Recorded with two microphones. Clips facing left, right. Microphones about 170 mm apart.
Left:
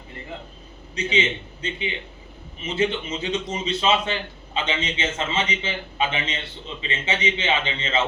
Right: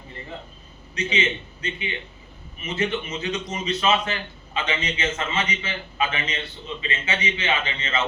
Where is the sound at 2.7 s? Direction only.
30° left (ahead or behind).